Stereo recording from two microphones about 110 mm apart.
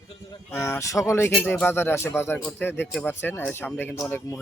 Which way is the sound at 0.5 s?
25° left (ahead or behind).